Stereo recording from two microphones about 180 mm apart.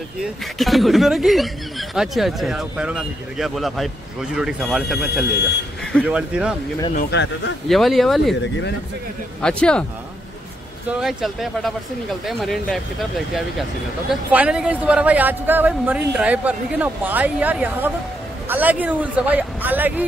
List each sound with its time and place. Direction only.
0.2 s speech: centre (ahead or behind)
7.1 s a man's voice: 80° left
7.6 s speech: centre (ahead or behind)
9.4 s speech: 5° left (ahead or behind)
10.9 s speech: 5° right (ahead or behind)
14.3 s speech: 5° right (ahead or behind)